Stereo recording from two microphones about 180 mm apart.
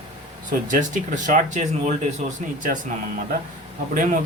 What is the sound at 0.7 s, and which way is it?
Speech, 45° right (ahead or behind).